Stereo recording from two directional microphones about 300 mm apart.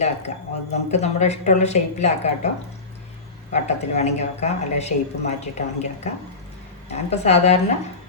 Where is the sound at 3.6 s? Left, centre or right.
Left.